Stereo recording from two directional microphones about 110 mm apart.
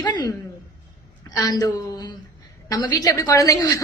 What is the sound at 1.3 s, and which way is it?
Speech, 35° left (ahead or behind).